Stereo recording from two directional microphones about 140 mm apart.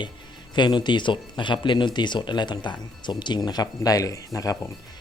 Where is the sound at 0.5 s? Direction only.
30° left (ahead or behind).